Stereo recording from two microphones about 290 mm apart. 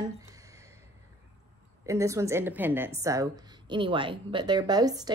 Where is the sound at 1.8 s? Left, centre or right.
Centre.